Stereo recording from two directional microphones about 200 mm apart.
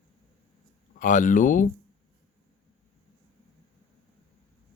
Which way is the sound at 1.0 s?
40° left (ahead or behind).